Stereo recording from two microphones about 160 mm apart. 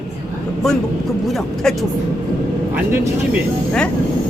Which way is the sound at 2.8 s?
15° right (ahead or behind).